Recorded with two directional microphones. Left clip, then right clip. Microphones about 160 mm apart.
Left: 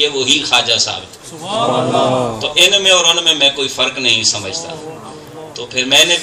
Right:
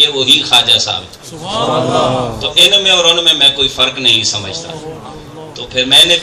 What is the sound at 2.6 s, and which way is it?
Speech, 5° right (ahead or behind).